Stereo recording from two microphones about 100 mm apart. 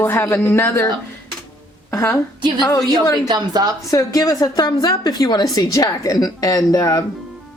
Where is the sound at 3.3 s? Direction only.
40° right (ahead or behind).